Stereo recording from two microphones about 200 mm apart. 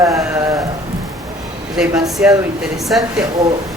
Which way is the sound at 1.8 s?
Centre (ahead or behind).